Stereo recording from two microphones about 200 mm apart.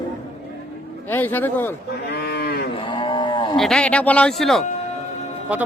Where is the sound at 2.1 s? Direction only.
55° left (ahead or behind).